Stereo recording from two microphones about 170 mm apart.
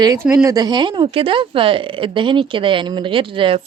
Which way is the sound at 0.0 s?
20° right (ahead or behind).